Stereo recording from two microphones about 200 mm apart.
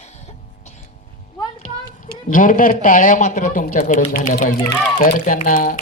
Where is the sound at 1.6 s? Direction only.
40° left (ahead or behind).